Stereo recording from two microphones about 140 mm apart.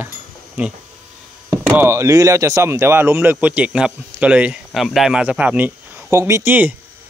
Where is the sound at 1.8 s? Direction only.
20° right (ahead or behind).